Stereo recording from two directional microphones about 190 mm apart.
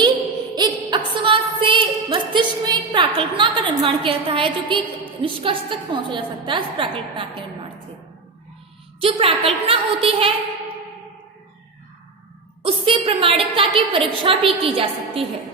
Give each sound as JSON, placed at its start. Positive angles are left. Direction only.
{"t": 0.5, "sound": "a sound", "side_deg": -20}
{"t": 5.2, "sound": "a woman's voice", "side_deg": -25}
{"t": 9.0, "sound": "a woman's voice", "side_deg": -30}
{"t": 12.6, "sound": "a woman's voice", "side_deg": -30}